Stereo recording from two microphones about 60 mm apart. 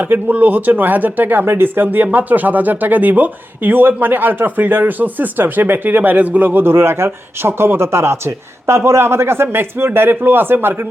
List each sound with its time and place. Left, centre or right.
0.0 s speech: right